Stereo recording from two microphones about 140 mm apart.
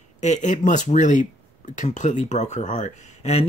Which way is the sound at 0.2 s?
55° left (ahead or behind).